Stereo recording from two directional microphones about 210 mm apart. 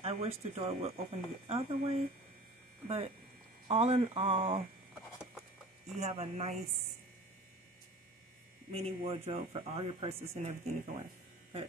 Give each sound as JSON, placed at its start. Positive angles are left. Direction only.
{"t": 0.0, "sound": "speech", "side_deg": -30}
{"t": 3.6, "sound": "speech", "side_deg": -30}
{"t": 5.9, "sound": "speech", "side_deg": -30}
{"t": 8.7, "sound": "speech", "side_deg": -30}